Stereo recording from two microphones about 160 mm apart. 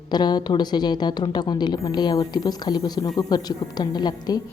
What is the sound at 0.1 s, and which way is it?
A woman's voice, 25° left (ahead or behind).